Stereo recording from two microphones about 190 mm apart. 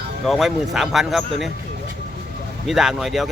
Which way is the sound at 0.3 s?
Centre (ahead or behind).